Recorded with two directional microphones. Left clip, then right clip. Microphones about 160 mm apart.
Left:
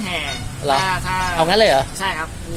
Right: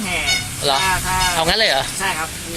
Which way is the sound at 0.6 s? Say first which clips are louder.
Left 2 dB; 5° left (ahead or behind).